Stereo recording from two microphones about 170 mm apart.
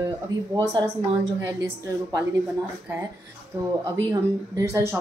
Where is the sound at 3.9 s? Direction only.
15° right (ahead or behind).